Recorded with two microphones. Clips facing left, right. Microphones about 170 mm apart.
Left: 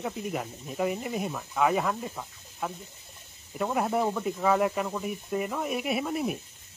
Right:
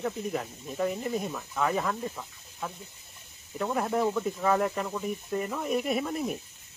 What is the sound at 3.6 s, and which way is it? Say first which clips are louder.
Speech: left 1 dB; 10° left (ahead or behind).